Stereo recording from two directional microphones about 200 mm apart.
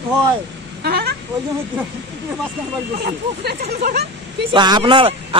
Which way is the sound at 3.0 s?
50° right (ahead or behind).